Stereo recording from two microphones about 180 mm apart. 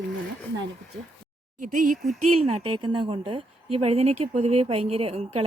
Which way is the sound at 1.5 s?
45° right (ahead or behind).